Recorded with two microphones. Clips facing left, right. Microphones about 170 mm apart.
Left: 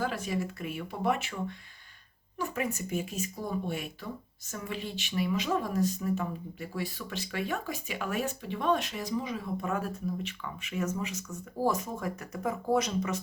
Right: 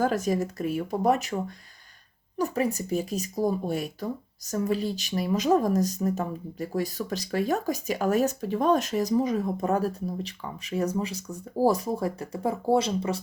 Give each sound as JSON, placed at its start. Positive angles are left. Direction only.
{"t": 0.0, "sound": "speech", "side_deg": -45}